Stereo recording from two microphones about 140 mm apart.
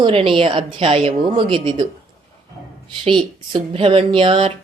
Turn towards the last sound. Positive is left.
turn(degrees=-40)  # may be behind; listen again after turning